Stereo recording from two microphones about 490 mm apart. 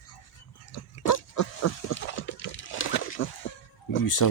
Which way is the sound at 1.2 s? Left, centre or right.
Left.